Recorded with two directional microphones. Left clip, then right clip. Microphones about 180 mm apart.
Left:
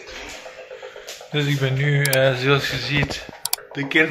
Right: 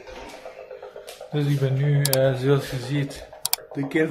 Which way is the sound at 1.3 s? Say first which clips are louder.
Left 4 dB; centre (ahead or behind).